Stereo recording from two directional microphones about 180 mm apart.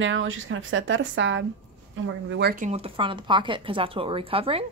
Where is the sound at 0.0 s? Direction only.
90° right.